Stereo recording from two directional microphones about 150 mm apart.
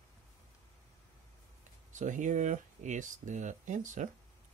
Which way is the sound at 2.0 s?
55° right (ahead or behind).